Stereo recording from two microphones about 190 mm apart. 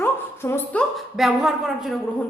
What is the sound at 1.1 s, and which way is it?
Speech, centre (ahead or behind).